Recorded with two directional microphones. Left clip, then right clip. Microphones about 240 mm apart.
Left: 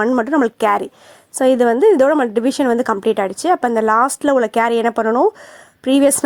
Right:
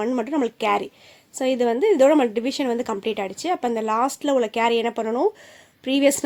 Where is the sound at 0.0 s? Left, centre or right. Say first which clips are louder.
Left 8 dB; left.